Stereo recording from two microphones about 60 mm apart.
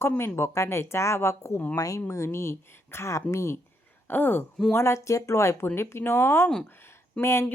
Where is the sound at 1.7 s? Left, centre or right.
Left.